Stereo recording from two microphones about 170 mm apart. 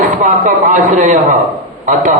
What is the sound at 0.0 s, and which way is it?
Speech, 50° right (ahead or behind).